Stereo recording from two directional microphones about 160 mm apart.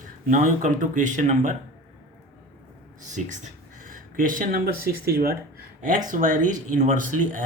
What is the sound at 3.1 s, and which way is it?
Speech, 50° right (ahead or behind).